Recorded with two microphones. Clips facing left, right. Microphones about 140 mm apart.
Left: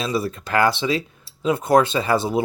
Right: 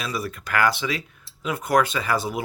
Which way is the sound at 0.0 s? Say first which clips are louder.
Left 6 dB; 25° left (ahead or behind).